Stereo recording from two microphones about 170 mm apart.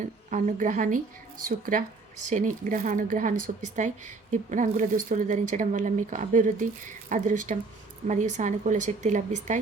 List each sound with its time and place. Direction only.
0.3 s a woman's voice: 45° right (ahead or behind)